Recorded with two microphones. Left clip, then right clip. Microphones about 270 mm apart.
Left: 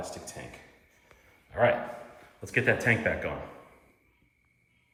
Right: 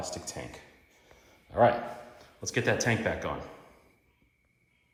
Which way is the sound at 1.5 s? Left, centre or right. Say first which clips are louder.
Right 1 dB; centre.